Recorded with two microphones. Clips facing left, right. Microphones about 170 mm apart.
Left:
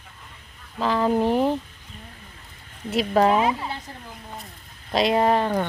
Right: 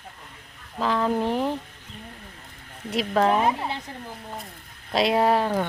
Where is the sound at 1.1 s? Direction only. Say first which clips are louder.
Left 4 dB; 15° left (ahead or behind).